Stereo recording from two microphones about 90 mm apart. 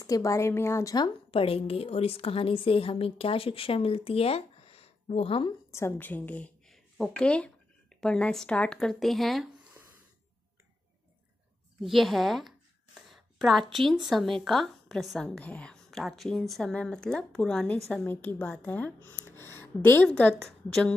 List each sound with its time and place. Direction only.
0.0 s speech: 40° left (ahead or behind)
1.3 s a woman's voice: 90° left
5.7 s speech: 30° left (ahead or behind)
6.7 s a sound: 5° left (ahead or behind)
8.7 s speech: centre (ahead or behind)
9.8 s a sound: 25° right (ahead or behind)
11.8 s speech: centre (ahead or behind)
15.2 s a woman's voice: 15° left (ahead or behind)
18.0 s a woman's voice: 20° left (ahead or behind)
20.4 s speech: 5° left (ahead or behind)